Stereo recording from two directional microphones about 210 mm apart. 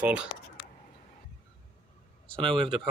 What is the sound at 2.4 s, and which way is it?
Speech, 25° right (ahead or behind).